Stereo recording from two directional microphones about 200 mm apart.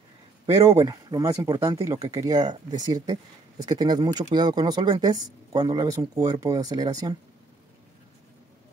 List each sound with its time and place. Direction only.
0.7 s speech: 20° right (ahead or behind)